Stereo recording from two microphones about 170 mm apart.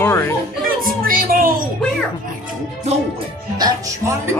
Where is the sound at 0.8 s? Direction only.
55° right (ahead or behind).